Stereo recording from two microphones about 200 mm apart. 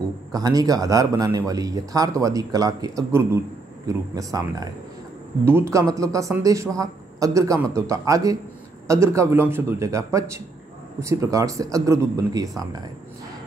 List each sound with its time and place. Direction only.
0.3 s a man's voice: 20° right (ahead or behind)